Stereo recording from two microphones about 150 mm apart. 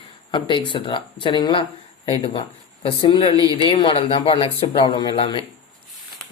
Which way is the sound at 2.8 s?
30° left (ahead or behind).